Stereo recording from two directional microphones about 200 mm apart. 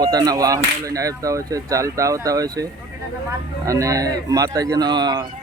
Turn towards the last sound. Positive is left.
turn(degrees=-20)  # may be behind; listen again after turning